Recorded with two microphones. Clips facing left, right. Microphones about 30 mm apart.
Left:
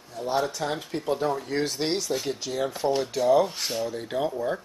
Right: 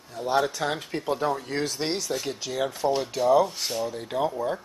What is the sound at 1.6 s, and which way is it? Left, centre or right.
Speech, centre.